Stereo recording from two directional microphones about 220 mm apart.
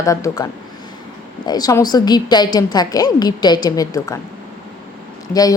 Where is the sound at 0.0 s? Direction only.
15° left (ahead or behind).